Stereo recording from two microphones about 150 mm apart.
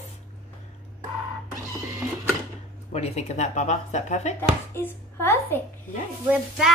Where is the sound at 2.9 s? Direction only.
45° left (ahead or behind).